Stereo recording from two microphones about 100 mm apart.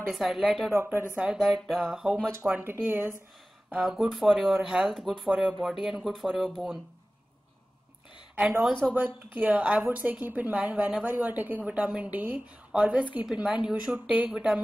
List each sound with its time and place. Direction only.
0.1 s speech: 5° right (ahead or behind)
0.7 s speech: 25° right (ahead or behind)
1.1 s a woman's voice: 10° right (ahead or behind)
2.9 s speech: 20° right (ahead or behind)
3.8 s speech: centre (ahead or behind)
8.4 s a woman's voice: 10° right (ahead or behind)